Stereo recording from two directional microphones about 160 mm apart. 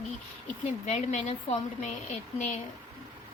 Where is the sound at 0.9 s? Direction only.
45° left (ahead or behind).